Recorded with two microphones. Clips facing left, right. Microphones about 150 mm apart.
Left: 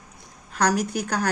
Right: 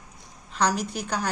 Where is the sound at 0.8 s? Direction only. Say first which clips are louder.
Left 4 dB; 50° left (ahead or behind).